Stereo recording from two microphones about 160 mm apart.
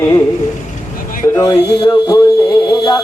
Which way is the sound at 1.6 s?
90° left.